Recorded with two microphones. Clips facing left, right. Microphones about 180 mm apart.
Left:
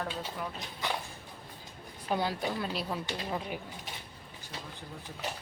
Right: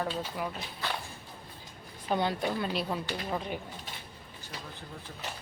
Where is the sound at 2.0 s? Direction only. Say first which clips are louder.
Right 2 dB; 5° left (ahead or behind).